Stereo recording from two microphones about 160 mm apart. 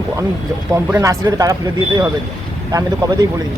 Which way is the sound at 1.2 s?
20° right (ahead or behind).